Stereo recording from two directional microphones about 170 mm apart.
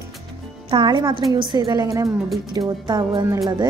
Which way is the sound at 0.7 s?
30° right (ahead or behind).